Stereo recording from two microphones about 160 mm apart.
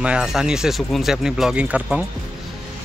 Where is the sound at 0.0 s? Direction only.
5° right (ahead or behind).